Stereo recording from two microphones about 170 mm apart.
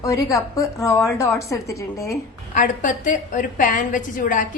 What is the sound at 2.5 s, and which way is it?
A woman's voice, 50° left (ahead or behind).